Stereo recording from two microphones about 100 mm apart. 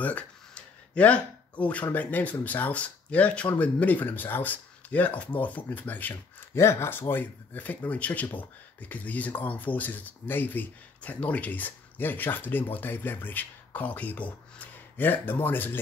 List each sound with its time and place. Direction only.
0.0 s speech: 15° left (ahead or behind)